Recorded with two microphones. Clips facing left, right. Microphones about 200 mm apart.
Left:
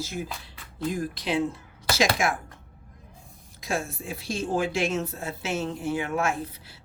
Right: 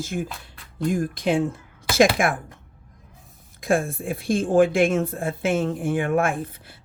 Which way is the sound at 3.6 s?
55° right (ahead or behind).